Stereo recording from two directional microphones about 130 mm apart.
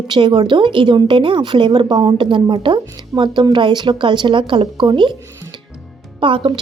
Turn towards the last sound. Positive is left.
turn(degrees=-40)  # may be behind; listen again after turning